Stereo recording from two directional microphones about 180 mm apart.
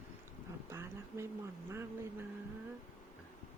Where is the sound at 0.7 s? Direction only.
15° right (ahead or behind).